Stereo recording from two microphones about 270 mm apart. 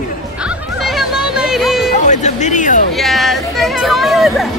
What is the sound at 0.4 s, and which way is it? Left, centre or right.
Music, centre.